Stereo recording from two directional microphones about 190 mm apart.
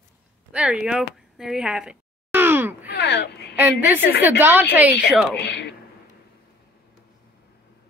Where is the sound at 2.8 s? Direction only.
65° left (ahead or behind).